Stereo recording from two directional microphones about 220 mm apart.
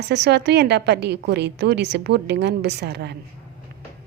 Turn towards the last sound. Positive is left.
turn(degrees=-50)  # may be behind; listen again after turning